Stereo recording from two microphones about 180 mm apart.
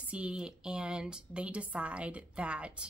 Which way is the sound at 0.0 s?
5° right (ahead or behind).